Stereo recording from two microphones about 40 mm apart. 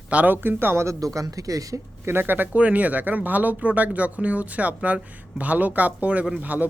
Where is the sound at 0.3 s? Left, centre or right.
Right.